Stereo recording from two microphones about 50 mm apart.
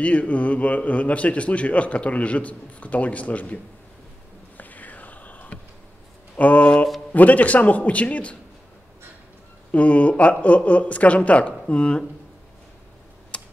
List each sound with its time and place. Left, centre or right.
0.0 s a man's voice: left
4.6 s a sound: left
6.3 s a man's voice: left
9.7 s a man's voice: left
13.3 s typing: left